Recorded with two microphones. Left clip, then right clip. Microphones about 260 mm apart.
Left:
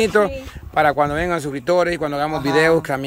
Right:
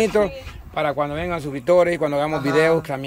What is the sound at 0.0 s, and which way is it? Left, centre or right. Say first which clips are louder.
Speech: left 2 dB; centre.